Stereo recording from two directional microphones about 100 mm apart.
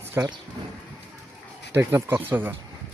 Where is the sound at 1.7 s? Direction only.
25° right (ahead or behind).